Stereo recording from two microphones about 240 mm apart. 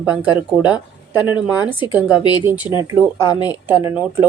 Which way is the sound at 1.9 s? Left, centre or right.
Centre.